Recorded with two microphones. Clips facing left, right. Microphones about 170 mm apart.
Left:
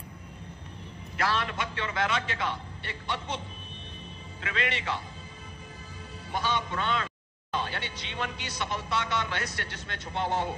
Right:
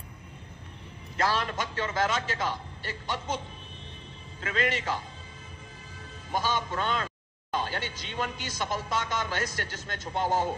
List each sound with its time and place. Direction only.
1.1 s a man's voice: 40° right (ahead or behind)
4.4 s speech: 40° right (ahead or behind)
6.3 s a man's voice: 40° right (ahead or behind)